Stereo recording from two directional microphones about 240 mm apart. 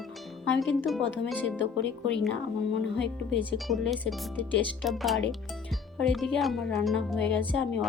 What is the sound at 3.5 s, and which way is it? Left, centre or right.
Speech, centre.